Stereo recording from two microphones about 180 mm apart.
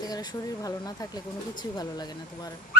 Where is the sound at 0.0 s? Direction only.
20° left (ahead or behind).